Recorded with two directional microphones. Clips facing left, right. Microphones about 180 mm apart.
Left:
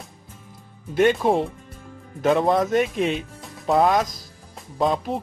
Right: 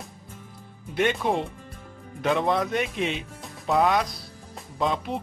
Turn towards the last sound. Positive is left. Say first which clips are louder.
# left 4 dB
turn(degrees=40)  # may be behind; listen again after turning